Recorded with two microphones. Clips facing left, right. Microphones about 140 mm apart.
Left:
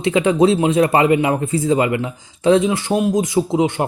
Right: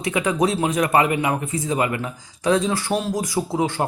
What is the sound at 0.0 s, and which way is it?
Speech, 25° left (ahead or behind).